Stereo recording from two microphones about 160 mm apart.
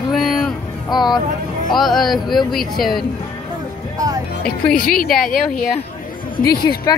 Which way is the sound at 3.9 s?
20° right (ahead or behind).